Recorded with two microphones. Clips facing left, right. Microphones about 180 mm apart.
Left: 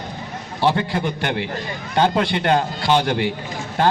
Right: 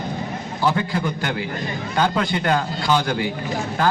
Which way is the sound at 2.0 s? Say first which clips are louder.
Left 3 dB; 30° left (ahead or behind).